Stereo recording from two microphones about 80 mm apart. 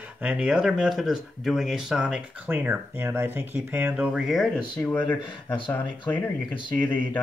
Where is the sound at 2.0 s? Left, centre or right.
Centre.